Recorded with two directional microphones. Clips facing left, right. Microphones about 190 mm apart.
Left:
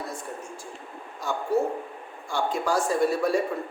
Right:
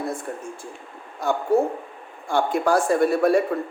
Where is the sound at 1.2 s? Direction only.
55° right (ahead or behind).